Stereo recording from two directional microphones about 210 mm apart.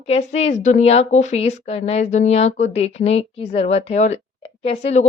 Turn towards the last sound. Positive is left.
turn(degrees=30)  # may be behind; listen again after turning